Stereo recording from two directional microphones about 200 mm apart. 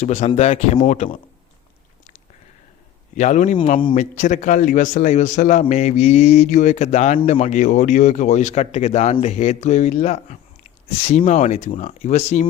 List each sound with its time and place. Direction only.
0.0 s a man's voice: 30° left (ahead or behind)
3.2 s a man's voice: 35° left (ahead or behind)